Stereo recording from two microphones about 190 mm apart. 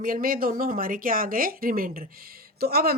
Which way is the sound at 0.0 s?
45° right (ahead or behind).